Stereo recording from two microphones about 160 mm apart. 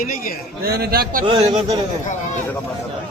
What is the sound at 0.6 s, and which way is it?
Speech, 70° right (ahead or behind).